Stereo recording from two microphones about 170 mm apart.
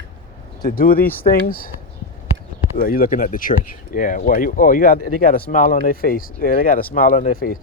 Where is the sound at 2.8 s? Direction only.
55° left (ahead or behind).